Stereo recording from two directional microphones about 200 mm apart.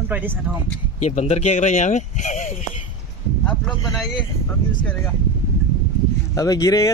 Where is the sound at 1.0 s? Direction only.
35° left (ahead or behind).